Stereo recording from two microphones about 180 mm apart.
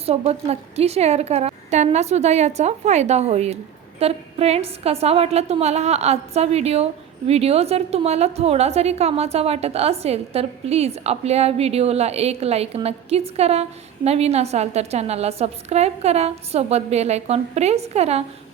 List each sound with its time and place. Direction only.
0.0 s a woman's voice: 35° right (ahead or behind)